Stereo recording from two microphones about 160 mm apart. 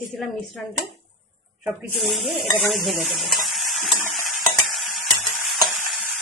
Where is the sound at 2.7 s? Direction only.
Centre (ahead or behind).